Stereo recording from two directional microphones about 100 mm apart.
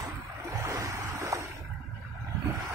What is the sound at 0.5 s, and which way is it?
Waves, 35° right (ahead or behind).